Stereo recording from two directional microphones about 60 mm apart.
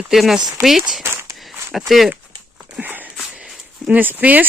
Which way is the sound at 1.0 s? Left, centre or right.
Right.